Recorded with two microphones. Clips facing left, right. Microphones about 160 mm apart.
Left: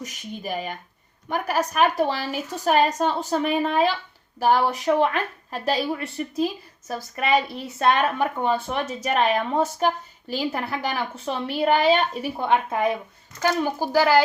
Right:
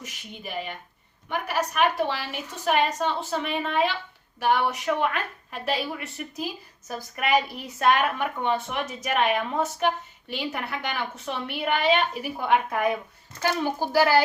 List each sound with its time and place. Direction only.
0.0 s a woman's voice: 40° left (ahead or behind)
7.8 s a woman's voice: 30° left (ahead or behind)